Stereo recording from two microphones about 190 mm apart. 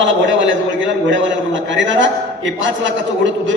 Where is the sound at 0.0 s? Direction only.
80° right.